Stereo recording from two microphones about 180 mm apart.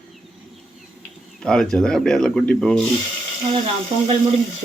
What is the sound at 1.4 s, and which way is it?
Speech, 5° left (ahead or behind).